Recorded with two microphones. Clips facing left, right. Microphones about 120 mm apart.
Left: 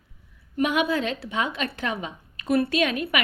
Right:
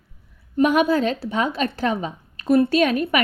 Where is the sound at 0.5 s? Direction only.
40° right (ahead or behind).